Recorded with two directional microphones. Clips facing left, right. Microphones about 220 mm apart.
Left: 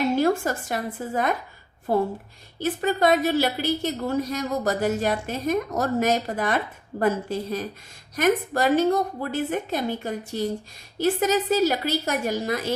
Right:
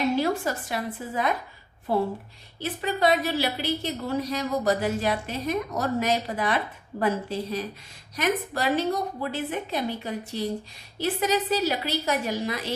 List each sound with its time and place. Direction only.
0.2 s a woman's voice: 45° left (ahead or behind)